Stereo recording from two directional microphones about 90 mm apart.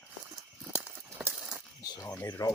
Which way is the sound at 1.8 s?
45° left (ahead or behind).